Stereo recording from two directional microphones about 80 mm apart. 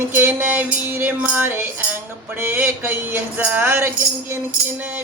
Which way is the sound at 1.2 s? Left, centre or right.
Right.